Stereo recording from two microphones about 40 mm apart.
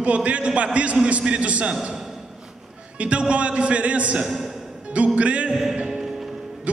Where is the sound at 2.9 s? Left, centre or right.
Right.